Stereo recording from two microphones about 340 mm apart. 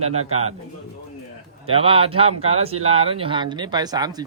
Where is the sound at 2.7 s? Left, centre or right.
Right.